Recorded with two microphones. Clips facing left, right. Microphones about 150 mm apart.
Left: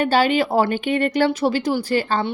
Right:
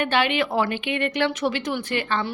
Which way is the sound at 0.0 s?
35° left (ahead or behind).